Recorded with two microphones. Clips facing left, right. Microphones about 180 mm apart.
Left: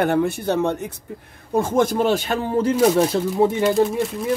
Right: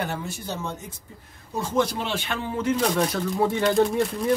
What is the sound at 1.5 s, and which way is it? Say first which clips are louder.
Speech: left 6 dB; 50° left (ahead or behind).